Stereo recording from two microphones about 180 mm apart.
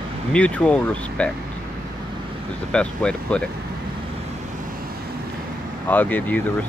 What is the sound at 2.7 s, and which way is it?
Speech, 5° left (ahead or behind).